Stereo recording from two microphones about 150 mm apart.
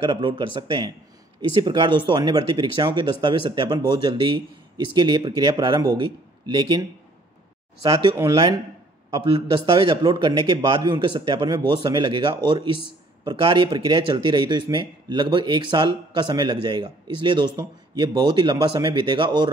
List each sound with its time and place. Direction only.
0.0 s speech: 35° right (ahead or behind)
7.8 s speech: 30° right (ahead or behind)